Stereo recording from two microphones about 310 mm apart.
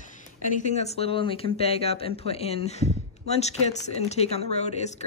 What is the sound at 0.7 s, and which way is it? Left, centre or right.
Speech, centre.